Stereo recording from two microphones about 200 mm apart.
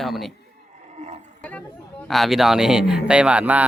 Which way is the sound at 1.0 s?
35° right (ahead or behind).